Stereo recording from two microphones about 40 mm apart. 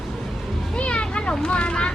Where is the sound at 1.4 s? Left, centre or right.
Left.